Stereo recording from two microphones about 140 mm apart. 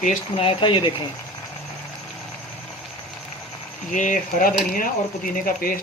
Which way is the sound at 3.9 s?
65° left (ahead or behind).